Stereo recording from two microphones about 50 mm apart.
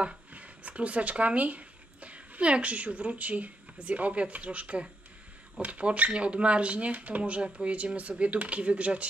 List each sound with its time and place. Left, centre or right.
0.0 s speech: right